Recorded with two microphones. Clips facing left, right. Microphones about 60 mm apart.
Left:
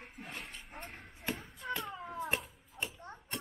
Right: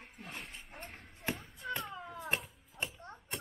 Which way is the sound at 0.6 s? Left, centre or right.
Centre.